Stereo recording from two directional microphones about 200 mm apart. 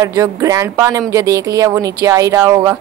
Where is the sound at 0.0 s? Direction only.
15° right (ahead or behind).